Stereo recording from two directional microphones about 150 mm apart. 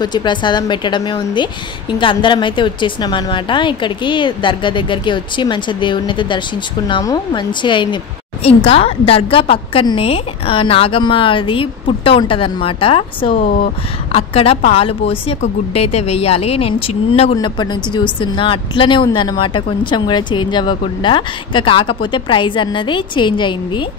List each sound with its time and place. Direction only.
0.0 s a woman's voice: 30° left (ahead or behind)